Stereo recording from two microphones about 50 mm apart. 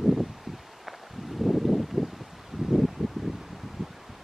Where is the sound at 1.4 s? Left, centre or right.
Centre.